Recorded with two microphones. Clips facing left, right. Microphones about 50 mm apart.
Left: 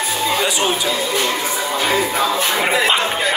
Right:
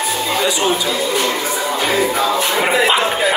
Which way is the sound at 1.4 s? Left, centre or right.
Centre.